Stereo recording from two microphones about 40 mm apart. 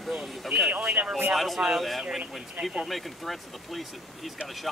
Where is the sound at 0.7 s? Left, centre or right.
Right.